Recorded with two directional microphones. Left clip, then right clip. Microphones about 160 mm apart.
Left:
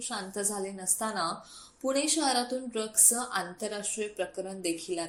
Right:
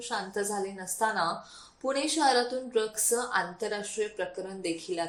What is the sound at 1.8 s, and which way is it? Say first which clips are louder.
A woman's voice: right 2 dB; 35° left (ahead or behind).